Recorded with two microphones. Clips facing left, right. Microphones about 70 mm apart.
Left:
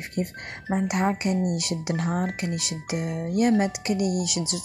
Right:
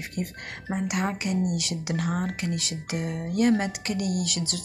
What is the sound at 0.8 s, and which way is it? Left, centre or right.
Speech, left.